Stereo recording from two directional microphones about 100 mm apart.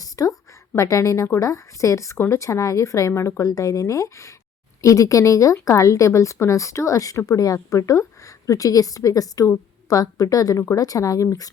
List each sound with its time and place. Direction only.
0.0 s a woman's voice: 35° left (ahead or behind)